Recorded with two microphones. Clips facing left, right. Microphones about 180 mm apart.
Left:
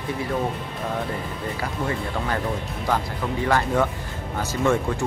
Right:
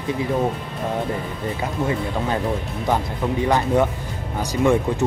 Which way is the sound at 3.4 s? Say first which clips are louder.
Right 2 dB; 20° right (ahead or behind).